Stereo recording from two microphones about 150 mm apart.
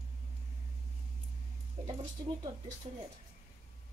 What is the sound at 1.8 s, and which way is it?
Speech, 40° right (ahead or behind).